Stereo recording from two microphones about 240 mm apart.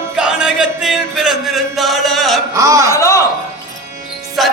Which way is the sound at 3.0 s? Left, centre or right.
Centre.